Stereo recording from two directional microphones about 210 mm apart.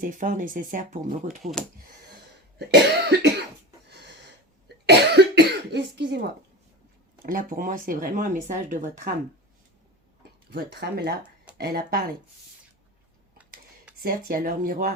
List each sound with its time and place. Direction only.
0.0 s speech: 40° right (ahead or behind)
3.1 s speech: 50° right (ahead or behind)
4.9 s cough: 50° right (ahead or behind)
7.3 s speech: 40° right (ahead or behind)
10.5 s speech: 50° right (ahead or behind)
14.0 s speech: 45° right (ahead or behind)